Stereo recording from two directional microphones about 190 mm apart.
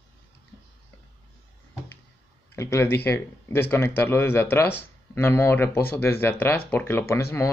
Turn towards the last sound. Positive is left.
turn(degrees=15)  # may be behind; listen again after turning